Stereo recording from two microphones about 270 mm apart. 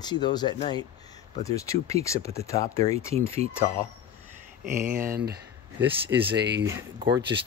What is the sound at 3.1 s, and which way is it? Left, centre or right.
Speech, right.